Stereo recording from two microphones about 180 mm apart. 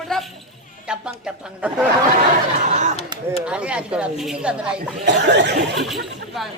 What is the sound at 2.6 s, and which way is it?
Speech, 40° right (ahead or behind).